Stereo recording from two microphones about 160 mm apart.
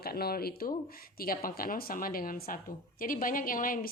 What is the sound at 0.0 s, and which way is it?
Speech, 75° left (ahead or behind).